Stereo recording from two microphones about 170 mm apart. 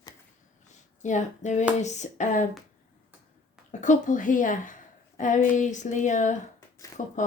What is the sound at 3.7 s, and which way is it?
Speech, 45° left (ahead or behind).